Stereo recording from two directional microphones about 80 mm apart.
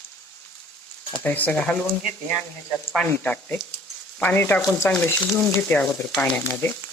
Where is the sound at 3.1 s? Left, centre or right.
Centre.